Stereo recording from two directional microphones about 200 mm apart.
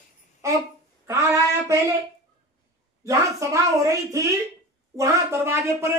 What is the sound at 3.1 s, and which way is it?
A woman's voice, 15° right (ahead or behind).